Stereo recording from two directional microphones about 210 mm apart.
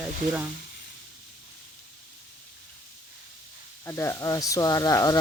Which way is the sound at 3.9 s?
15° left (ahead or behind).